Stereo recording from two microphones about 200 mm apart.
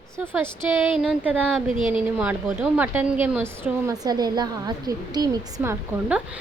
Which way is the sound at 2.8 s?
10° right (ahead or behind).